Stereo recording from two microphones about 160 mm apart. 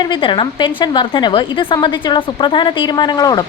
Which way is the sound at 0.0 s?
30° left (ahead or behind).